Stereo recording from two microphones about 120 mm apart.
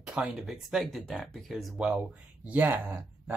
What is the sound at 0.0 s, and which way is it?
Speech, 5° right (ahead or behind).